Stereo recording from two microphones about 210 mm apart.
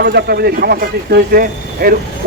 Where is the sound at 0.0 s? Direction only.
50° right (ahead or behind).